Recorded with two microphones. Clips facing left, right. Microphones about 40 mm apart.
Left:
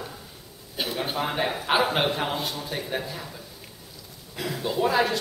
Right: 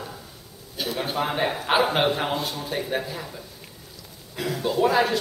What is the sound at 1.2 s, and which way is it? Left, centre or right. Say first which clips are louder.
A man's voice: right 3 dB; centre.